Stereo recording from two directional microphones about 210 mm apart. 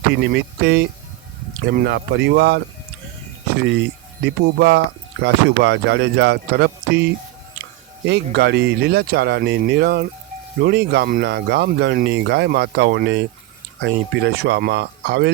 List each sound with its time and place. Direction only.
0.1 s speech: 55° right (ahead or behind)